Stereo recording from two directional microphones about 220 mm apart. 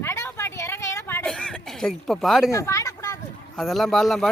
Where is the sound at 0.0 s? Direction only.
10° left (ahead or behind).